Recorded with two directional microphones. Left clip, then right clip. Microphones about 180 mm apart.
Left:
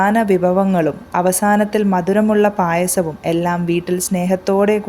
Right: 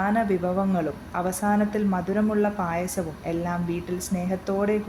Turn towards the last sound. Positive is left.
turn(degrees=50)  # may be behind; listen again after turning